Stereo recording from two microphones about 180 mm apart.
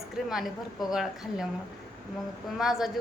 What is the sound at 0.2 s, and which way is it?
A woman's voice, centre (ahead or behind).